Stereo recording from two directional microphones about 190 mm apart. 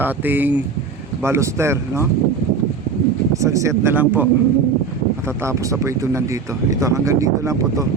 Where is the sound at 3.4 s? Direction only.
15° right (ahead or behind).